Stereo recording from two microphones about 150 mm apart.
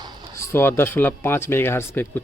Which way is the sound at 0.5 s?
15° left (ahead or behind).